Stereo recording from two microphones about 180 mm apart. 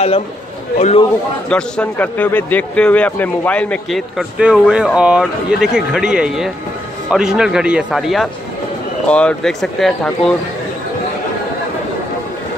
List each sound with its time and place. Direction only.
0.7 s a man's voice: 35° left (ahead or behind)
1.5 s a man's voice: 5° left (ahead or behind)